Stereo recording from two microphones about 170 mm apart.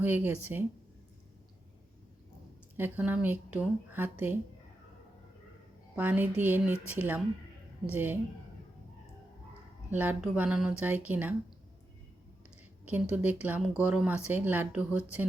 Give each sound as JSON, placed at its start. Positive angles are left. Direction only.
{"t": 0.0, "sound": "speech", "side_deg": -10}
{"t": 2.7, "sound": "speech", "side_deg": -10}
{"t": 6.0, "sound": "speech", "side_deg": -10}
{"t": 9.9, "sound": "speech", "side_deg": -10}
{"t": 12.8, "sound": "speech", "side_deg": -10}